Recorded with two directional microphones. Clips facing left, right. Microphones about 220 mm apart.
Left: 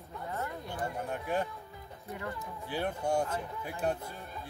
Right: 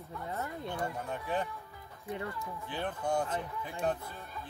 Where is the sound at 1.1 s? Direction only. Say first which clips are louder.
Left 2 dB; 10° left (ahead or behind).